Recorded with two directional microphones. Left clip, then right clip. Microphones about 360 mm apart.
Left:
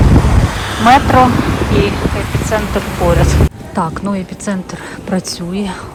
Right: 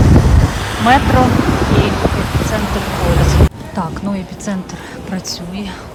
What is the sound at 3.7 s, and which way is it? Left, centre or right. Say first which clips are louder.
Speech: left 7 dB; centre.